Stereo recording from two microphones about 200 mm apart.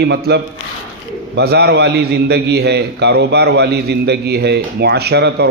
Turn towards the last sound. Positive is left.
turn(degrees=-55)  # may be behind; listen again after turning